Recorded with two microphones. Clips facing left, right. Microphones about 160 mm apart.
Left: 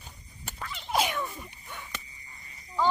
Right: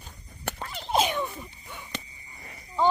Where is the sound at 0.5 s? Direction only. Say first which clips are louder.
Right 2 dB; 35° right (ahead or behind).